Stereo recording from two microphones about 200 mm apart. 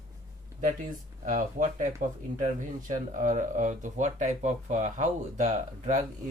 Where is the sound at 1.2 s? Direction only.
40° right (ahead or behind).